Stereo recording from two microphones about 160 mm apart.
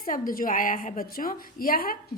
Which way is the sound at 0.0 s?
60° left (ahead or behind).